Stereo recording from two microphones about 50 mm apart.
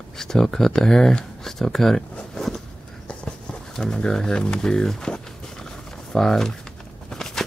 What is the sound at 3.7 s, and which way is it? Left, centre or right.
Speech, centre.